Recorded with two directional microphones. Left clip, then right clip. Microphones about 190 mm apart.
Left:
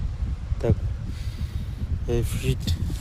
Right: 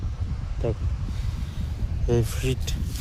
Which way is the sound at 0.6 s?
25° left (ahead or behind).